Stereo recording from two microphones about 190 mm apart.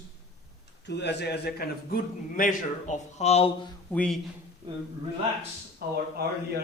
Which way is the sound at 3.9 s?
5° left (ahead or behind).